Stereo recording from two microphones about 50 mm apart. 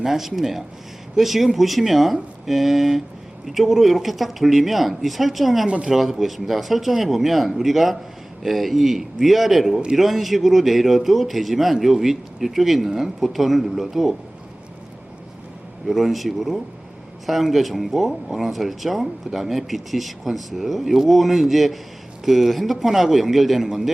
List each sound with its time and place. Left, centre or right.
0.0 s speech: centre
5.6 s speech: centre
5.9 s speech: centre
15.9 s speech: centre